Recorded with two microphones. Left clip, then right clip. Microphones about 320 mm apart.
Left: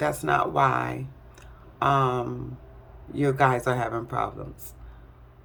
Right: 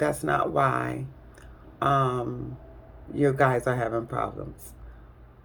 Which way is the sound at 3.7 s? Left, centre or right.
Left.